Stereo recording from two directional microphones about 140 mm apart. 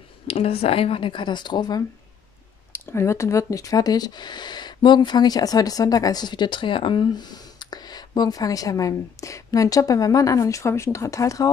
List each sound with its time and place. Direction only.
0.3 s speech: 45° left (ahead or behind); by 1.9 s 30° left (ahead or behind)
2.7 s speech: 20° left (ahead or behind)